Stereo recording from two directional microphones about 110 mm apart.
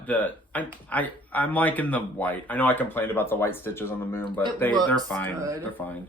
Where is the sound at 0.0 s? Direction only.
15° left (ahead or behind).